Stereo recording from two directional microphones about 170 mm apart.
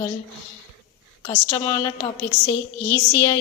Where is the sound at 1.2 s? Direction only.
25° left (ahead or behind).